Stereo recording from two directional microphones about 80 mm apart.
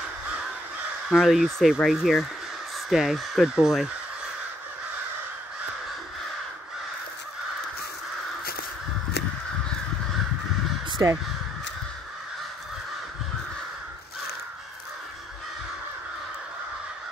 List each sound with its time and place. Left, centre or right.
1.1 s speech: centre
11.0 s speech: right